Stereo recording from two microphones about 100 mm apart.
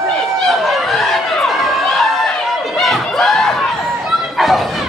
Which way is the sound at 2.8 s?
5° left (ahead or behind).